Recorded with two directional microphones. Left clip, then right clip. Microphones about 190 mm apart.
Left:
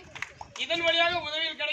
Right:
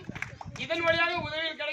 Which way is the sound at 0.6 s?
5° right (ahead or behind).